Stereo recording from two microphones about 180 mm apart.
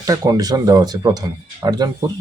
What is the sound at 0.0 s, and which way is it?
Speech, 20° right (ahead or behind).